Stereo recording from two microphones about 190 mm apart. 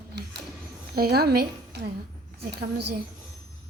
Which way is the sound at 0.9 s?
55° right (ahead or behind).